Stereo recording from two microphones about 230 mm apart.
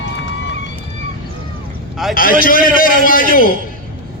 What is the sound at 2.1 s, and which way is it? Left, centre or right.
A man's voice, left.